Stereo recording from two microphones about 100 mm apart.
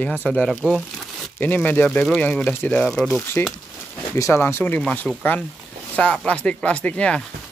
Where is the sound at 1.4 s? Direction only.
15° left (ahead or behind).